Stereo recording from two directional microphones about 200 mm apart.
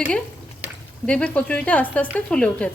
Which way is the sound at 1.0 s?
5° left (ahead or behind).